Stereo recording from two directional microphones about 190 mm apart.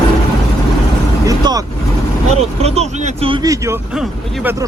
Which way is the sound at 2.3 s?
35° right (ahead or behind).